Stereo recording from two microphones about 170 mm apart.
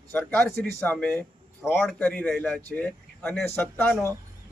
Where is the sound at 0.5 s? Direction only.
65° right (ahead or behind).